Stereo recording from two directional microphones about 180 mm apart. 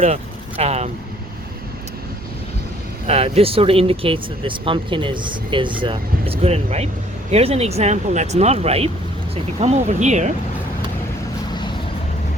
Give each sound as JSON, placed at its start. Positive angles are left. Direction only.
{"t": 0.0, "sound": "speech", "side_deg": -35}
{"t": 3.1, "sound": "speech", "side_deg": -35}